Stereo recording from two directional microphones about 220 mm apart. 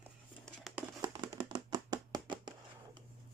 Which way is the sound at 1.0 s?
20° right (ahead or behind).